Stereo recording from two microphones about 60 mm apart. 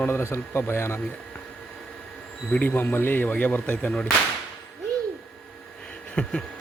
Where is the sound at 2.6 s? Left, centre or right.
Left.